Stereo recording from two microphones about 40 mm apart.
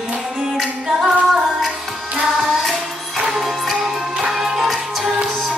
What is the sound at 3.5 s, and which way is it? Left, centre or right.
Music, centre.